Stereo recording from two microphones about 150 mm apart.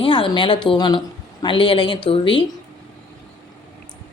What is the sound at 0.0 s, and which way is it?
A woman's voice, 35° left (ahead or behind).